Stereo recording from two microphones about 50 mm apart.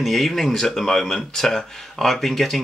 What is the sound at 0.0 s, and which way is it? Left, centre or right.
Speech, centre.